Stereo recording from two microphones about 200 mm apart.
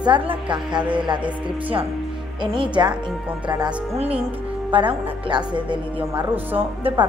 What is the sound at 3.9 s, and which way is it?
Speech, 30° right (ahead or behind).